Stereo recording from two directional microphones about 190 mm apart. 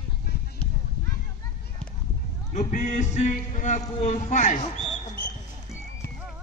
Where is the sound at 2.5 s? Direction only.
40° left (ahead or behind).